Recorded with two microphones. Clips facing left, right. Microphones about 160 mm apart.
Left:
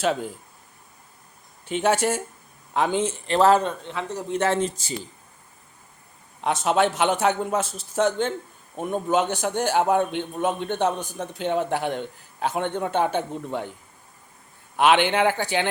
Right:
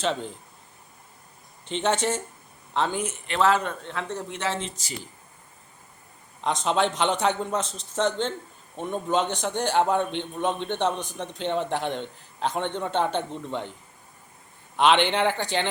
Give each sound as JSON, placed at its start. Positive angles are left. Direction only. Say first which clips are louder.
{"t": 0.0, "sound": "a man's voice", "louder": "left 3 dB", "side_deg": 10}
{"t": 1.6, "sound": "a man's voice", "louder": "left 3 dB", "side_deg": 10}
{"t": 2.9, "sound": "speech", "louder": "left 6 dB", "side_deg": 30}
{"t": 3.8, "sound": "a man's voice", "louder": "left 1 dB", "side_deg": 5}
{"t": 4.3, "sound": "speech", "louder": "left 7 dB", "side_deg": 50}
{"t": 6.4, "sound": "a man's voice", "louder": "left 3 dB", "side_deg": 5}
{"t": 14.8, "sound": "a man's voice", "louder": "left 2 dB", "side_deg": 5}